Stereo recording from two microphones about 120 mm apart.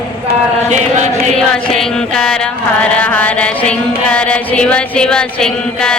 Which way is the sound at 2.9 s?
10° left (ahead or behind).